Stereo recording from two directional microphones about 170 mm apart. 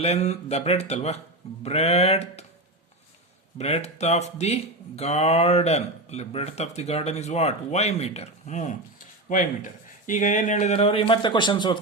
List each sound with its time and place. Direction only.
0.0 s speech: 40° left (ahead or behind)
3.6 s speech: 40° left (ahead or behind)